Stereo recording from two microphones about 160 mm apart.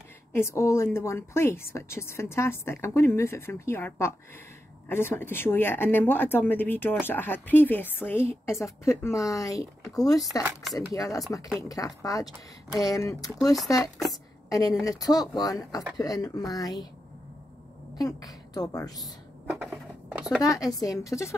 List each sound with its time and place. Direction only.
0.3 s a woman's voice: 15° left (ahead or behind)
10.4 s speech: centre (ahead or behind)
10.9 s speech: 20° left (ahead or behind)
14.5 s a woman's voice: 20° left (ahead or behind)
17.9 s a woman's voice: 25° left (ahead or behind)
19.5 s a sound: 10° right (ahead or behind)
20.4 s speech: 20° left (ahead or behind)